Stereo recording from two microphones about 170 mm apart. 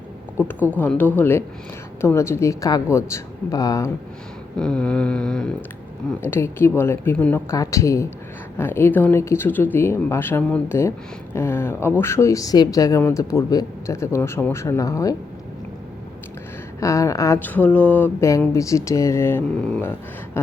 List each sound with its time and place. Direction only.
0.8 s speech: 10° left (ahead or behind)
4.5 s a sound: 5° left (ahead or behind)
6.1 s speech: 15° left (ahead or behind)
16.8 s speech: 20° left (ahead or behind)